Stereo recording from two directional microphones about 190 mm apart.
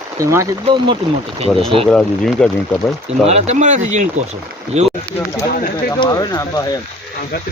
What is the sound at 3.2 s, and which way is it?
Speech, 35° right (ahead or behind).